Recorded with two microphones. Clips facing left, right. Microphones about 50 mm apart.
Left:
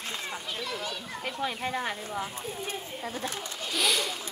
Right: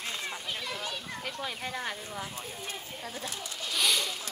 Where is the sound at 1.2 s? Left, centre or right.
Left.